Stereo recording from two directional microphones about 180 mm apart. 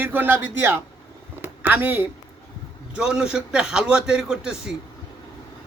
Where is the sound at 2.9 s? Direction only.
5° right (ahead or behind).